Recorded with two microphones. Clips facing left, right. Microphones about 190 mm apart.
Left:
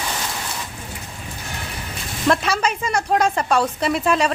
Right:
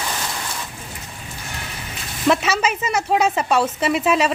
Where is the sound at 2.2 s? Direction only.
5° right (ahead or behind).